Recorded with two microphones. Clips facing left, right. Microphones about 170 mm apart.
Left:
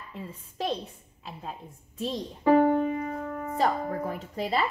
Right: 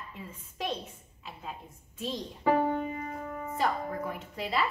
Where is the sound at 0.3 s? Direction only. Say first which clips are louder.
Left 4 dB; 35° left (ahead or behind).